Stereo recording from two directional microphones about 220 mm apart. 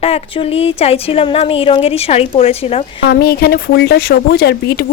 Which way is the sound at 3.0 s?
45° left (ahead or behind).